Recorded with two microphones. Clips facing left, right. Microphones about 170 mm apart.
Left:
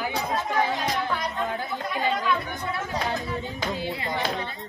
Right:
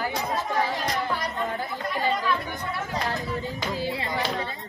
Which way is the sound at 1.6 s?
Centre (ahead or behind).